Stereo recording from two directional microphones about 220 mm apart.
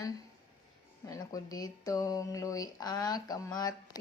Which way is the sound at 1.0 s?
15° left (ahead or behind).